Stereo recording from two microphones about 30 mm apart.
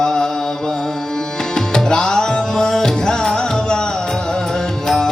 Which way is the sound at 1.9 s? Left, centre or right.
Left.